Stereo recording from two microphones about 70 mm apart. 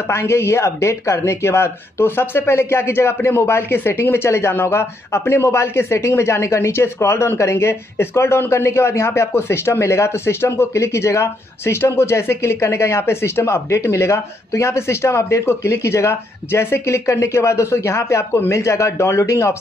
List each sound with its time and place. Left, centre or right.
0.1 s speech: left